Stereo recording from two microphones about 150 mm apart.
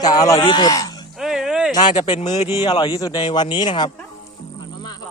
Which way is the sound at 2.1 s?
50° left (ahead or behind).